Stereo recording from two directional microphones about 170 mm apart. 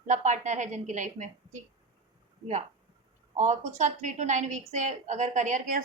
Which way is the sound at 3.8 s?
45° right (ahead or behind).